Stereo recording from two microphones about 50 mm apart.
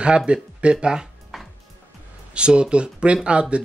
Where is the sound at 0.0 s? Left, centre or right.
Right.